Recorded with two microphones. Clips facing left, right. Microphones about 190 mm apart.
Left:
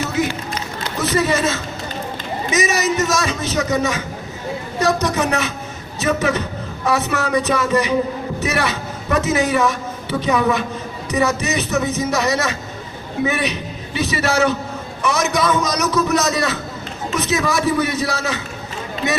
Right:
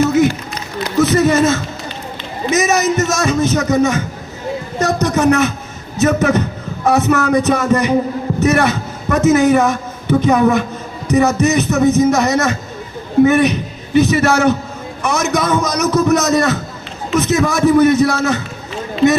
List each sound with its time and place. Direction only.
0.0 s run: 45° right (ahead or behind)
0.9 s a man's voice: 45° right (ahead or behind)